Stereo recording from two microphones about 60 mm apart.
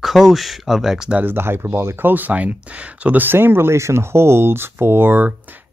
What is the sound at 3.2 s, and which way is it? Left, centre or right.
Speech, right.